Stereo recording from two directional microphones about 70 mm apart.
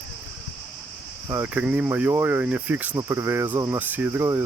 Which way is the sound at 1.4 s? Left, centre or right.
Right.